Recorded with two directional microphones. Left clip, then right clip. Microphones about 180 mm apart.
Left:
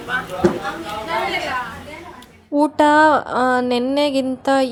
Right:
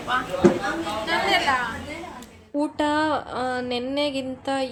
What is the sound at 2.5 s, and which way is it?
Speech, 45° left (ahead or behind).